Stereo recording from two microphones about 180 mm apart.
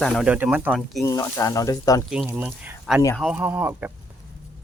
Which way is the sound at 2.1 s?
5° right (ahead or behind).